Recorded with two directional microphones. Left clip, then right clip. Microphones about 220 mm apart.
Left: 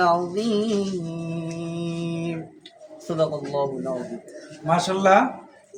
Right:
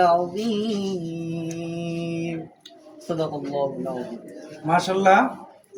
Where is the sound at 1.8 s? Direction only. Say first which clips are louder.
Even; 15° left (ahead or behind).